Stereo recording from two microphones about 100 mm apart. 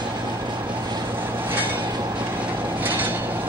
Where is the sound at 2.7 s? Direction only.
20° right (ahead or behind).